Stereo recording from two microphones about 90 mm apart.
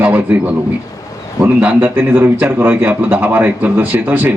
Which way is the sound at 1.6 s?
20° right (ahead or behind).